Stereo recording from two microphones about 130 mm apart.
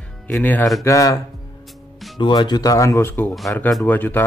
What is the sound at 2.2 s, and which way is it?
Speech, 35° left (ahead or behind).